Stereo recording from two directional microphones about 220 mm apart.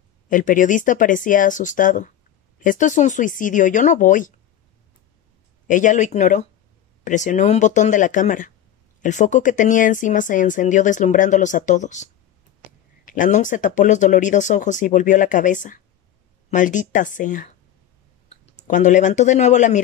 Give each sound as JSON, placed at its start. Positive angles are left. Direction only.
{"t": 0.3, "sound": "speech", "side_deg": 35}
{"t": 5.7, "sound": "speech", "side_deg": 35}